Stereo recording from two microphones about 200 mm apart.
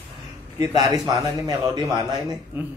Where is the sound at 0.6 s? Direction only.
20° right (ahead or behind).